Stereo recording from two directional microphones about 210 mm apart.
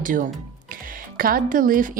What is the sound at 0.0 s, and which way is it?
Speech, 40° right (ahead or behind).